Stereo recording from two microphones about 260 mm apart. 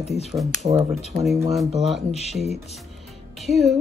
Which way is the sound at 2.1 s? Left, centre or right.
Left.